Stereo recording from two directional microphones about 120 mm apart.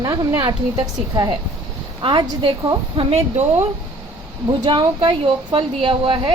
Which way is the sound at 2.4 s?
40° right (ahead or behind).